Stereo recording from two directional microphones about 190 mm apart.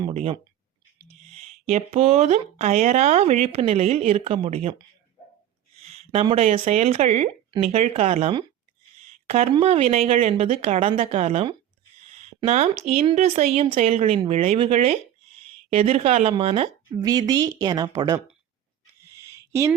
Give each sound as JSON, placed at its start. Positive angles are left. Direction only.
{"t": 0.1, "sound": "speech", "side_deg": -35}
{"t": 5.8, "sound": "speech", "side_deg": -35}
{"t": 12.9, "sound": "speech", "side_deg": -35}
{"t": 19.3, "sound": "a sound", "side_deg": -15}